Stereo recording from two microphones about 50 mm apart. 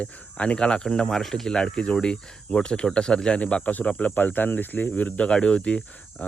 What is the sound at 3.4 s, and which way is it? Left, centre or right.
Speech, left.